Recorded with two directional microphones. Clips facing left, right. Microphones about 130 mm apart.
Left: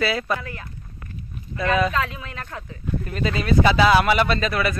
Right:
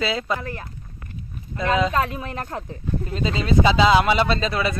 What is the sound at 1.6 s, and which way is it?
Speech, 20° right (ahead or behind).